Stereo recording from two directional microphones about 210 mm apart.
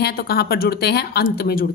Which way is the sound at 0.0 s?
50° left (ahead or behind).